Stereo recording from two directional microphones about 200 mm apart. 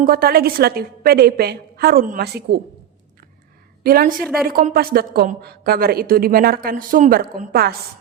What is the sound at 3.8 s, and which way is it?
A woman's voice, 50° right (ahead or behind).